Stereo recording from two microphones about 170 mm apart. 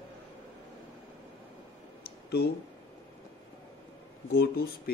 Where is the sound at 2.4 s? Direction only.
65° left (ahead or behind).